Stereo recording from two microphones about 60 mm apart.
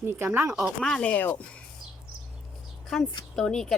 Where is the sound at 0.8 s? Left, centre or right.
Centre.